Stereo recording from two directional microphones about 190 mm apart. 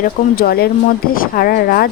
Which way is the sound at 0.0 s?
55° left (ahead or behind).